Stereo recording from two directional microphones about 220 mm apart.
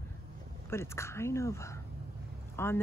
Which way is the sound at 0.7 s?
10° left (ahead or behind).